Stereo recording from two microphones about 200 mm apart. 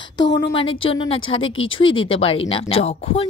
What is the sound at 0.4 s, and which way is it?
A woman's voice, 25° left (ahead or behind).